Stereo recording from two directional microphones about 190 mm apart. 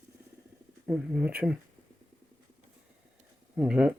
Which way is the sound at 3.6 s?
5° right (ahead or behind).